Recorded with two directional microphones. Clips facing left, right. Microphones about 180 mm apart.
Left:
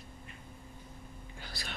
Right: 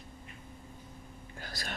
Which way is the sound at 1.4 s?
45° right (ahead or behind).